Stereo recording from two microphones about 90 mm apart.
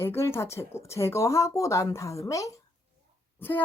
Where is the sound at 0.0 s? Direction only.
30° left (ahead or behind).